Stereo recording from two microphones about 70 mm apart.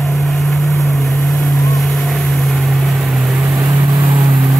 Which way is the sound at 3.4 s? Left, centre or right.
Right.